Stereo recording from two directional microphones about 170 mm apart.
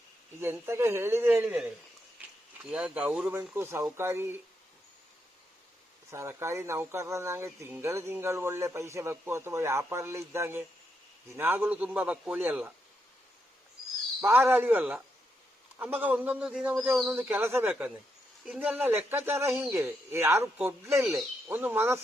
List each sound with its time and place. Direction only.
0.3 s speech: 15° right (ahead or behind)
6.1 s speech: 15° right (ahead or behind)
14.2 s speech: 15° right (ahead or behind)